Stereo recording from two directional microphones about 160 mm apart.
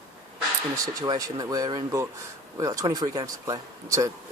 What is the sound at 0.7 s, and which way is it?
Speech, 20° right (ahead or behind).